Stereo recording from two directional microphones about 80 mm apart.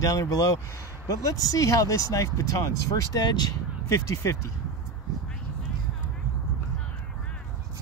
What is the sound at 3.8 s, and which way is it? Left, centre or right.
Speech, left.